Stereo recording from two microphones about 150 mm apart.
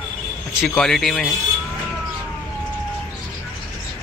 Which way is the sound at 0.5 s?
5° left (ahead or behind).